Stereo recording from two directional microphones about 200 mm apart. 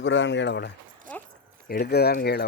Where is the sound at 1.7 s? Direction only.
50° left (ahead or behind).